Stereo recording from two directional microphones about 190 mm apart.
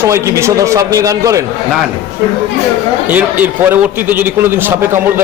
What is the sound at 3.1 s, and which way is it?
A man's voice, 10° right (ahead or behind).